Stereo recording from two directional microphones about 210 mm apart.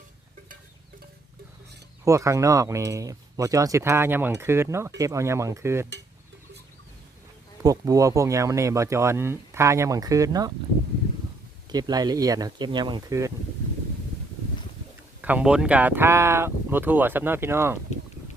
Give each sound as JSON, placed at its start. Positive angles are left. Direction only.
{"t": 2.0, "sound": "speech", "side_deg": -15}
{"t": 7.6, "sound": "speech", "side_deg": -15}
{"t": 11.7, "sound": "speech", "side_deg": -20}
{"t": 15.2, "sound": "speech", "side_deg": -5}